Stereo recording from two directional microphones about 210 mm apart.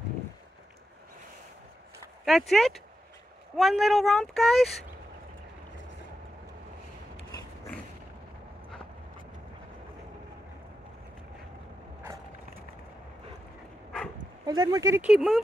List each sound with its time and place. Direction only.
2.2 s speech: centre (ahead or behind)
14.4 s speech: 20° right (ahead or behind); by 15.4 s centre (ahead or behind)